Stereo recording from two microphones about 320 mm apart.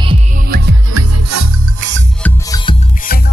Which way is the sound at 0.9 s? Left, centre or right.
Right.